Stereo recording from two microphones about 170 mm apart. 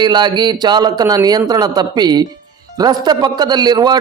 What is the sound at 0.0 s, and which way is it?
Speech, 25° right (ahead or behind).